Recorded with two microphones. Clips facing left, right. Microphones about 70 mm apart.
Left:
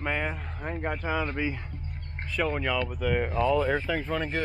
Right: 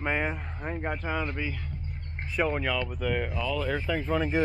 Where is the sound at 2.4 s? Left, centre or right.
Centre.